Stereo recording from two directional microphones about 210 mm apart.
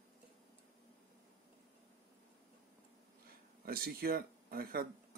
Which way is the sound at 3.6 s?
45° right (ahead or behind).